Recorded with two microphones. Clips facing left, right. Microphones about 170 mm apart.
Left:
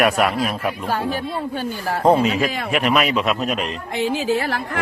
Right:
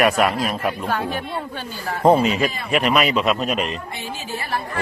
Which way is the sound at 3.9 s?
90° left.